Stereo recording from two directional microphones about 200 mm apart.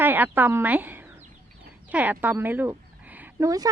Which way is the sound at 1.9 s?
10° right (ahead or behind).